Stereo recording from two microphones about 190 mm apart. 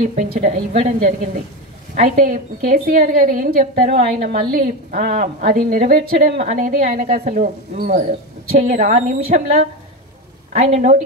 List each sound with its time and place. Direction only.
0.1 s a woman's voice: 45° right (ahead or behind)
6.3 s a woman's voice: 40° right (ahead or behind)